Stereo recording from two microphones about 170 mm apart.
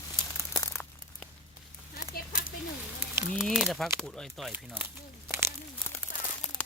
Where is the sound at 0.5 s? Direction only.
15° left (ahead or behind).